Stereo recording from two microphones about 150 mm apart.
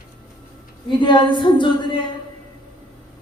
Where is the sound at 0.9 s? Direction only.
30° left (ahead or behind).